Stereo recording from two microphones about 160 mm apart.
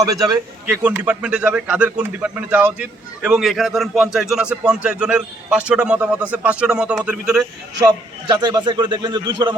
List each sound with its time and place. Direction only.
0.0 s a man's voice: 25° right (ahead or behind)
0.7 s a man's voice: 10° right (ahead or behind)
8.3 s a man's voice: 25° right (ahead or behind)